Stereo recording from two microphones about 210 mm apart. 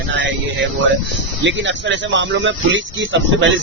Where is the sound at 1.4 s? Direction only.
60° right (ahead or behind).